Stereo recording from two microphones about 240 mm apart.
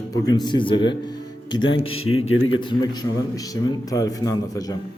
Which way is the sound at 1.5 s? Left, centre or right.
Left.